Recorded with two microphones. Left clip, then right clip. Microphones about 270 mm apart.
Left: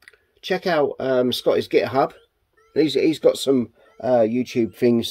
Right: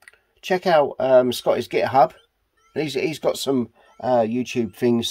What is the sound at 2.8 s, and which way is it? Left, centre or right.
Speech, right.